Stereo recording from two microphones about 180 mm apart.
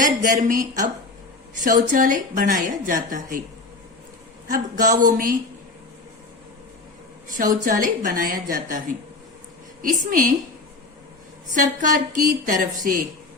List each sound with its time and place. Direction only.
0.0 s a woman's voice: 45° right (ahead or behind)
4.4 s a woman's voice: 45° right (ahead or behind)
7.5 s a woman's voice: 50° right (ahead or behind)
11.5 s a woman's voice: 45° right (ahead or behind)